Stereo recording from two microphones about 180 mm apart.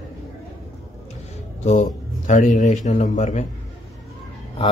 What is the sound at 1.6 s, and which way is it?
A man's voice, 40° left (ahead or behind).